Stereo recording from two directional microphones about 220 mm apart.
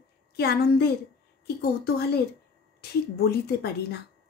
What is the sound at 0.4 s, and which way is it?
A woman's voice, 45° left (ahead or behind).